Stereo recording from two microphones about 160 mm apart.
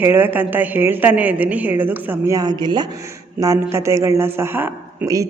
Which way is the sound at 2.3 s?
25° right (ahead or behind).